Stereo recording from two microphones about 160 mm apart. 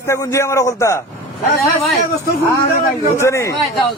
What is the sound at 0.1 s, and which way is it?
Speech, 20° left (ahead or behind).